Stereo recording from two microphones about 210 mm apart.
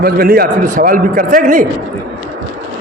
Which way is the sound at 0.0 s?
45° right (ahead or behind).